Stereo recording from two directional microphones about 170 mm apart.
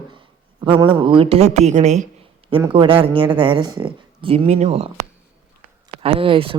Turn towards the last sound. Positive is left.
turn(degrees=-30)  # may be behind; listen again after turning